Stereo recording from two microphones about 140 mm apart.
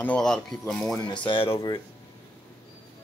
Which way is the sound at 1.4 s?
25° left (ahead or behind).